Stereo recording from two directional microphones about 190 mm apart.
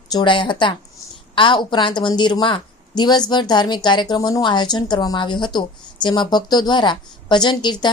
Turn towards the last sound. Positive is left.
turn(degrees=25)  # may be behind; listen again after turning